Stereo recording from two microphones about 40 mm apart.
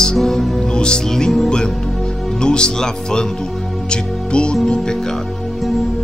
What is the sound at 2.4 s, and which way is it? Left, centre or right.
Speech, left.